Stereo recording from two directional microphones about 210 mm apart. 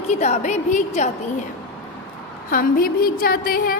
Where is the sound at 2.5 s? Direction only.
45° left (ahead or behind).